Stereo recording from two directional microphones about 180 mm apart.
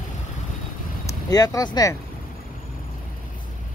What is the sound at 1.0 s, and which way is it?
Speech, 20° left (ahead or behind).